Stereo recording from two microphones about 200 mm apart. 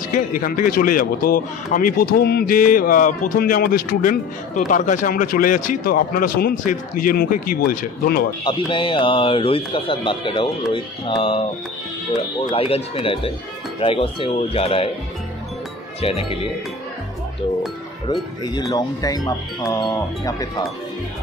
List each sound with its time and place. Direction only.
0.1 s a man's voice: 45° left (ahead or behind)
8.5 s speech: 25° left (ahead or behind)
12.4 s speech: 30° left (ahead or behind)
16.0 s speech: 30° left (ahead or behind)
18.0 s speech: 20° left (ahead or behind)